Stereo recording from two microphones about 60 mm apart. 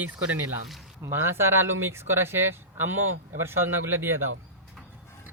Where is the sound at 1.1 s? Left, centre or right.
Right.